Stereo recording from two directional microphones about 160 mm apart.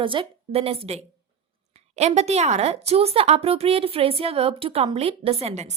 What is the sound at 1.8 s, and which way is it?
A woman's voice, 45° right (ahead or behind).